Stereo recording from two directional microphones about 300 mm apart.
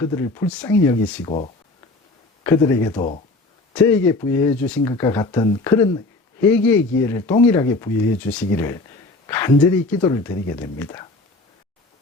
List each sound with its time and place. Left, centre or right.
0.0 s speech: centre
2.4 s speech: centre
9.2 s a sound: centre
10.0 s speech: centre